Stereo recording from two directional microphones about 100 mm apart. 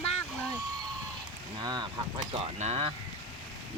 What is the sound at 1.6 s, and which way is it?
Speech, 45° right (ahead or behind).